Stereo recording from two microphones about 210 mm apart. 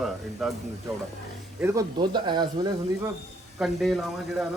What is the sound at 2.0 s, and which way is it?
Speech, 20° right (ahead or behind).